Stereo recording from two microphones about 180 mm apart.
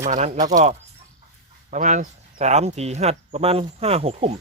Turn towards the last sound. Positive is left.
turn(degrees=-35)  # may be behind; listen again after turning